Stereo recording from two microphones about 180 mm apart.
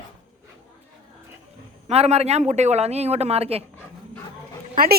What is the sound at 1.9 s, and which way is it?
Speech, 35° right (ahead or behind).